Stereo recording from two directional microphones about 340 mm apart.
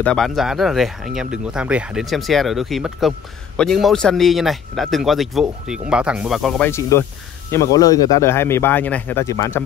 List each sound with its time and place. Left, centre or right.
0.0 s speech: centre